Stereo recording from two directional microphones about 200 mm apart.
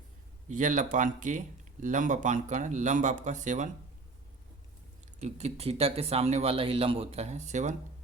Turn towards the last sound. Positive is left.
turn(degrees=-35)  # may be behind; listen again after turning